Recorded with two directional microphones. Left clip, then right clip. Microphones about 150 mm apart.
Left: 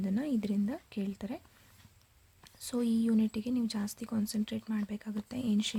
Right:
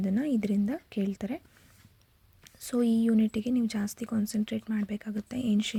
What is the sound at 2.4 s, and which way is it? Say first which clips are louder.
Speech: right 6 dB; 25° right (ahead or behind).